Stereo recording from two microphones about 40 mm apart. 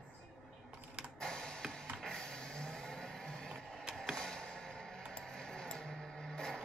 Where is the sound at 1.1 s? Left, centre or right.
Centre.